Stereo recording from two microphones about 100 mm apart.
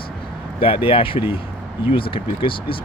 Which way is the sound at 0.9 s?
65° left (ahead or behind).